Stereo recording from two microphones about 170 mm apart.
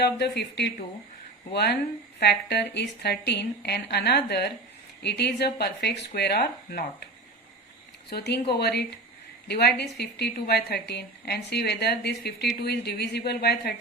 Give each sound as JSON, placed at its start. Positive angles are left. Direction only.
{"t": 0.0, "sound": "a woman's voice", "side_deg": 75}
{"t": 8.1, "sound": "a woman's voice", "side_deg": 75}